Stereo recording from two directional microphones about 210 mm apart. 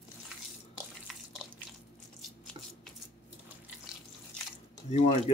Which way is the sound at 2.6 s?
25° right (ahead or behind).